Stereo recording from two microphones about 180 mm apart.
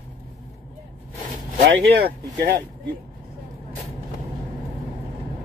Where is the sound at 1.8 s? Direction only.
65° right (ahead or behind).